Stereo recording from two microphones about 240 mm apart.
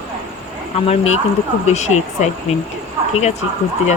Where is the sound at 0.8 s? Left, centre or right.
Left.